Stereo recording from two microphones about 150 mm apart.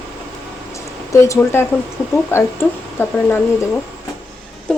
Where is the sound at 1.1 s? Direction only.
20° left (ahead or behind).